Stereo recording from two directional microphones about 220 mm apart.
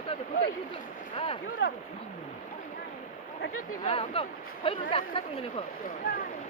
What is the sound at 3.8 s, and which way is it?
Speech, 25° left (ahead or behind).